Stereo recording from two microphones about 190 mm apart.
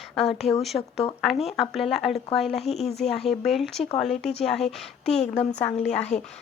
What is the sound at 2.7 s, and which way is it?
Speech, 35° left (ahead or behind).